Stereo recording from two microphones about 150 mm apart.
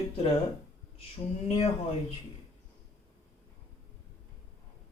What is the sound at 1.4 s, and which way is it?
Speech, 45° left (ahead or behind).